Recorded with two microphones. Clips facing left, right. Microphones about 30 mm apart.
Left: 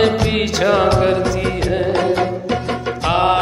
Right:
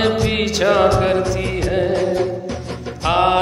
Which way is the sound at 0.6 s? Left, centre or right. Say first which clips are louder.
Right 1 dB; centre.